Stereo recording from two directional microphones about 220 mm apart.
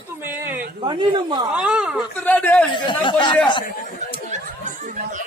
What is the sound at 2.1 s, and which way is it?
Speech, 5° left (ahead or behind).